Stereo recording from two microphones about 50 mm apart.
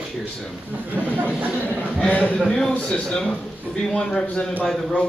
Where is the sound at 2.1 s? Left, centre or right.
Left.